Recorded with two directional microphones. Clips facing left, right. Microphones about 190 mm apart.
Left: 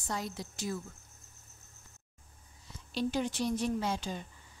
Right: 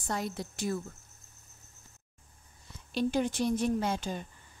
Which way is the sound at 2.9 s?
55° right (ahead or behind).